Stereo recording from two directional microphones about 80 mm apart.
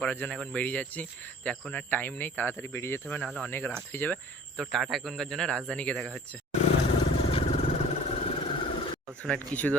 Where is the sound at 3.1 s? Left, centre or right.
Centre.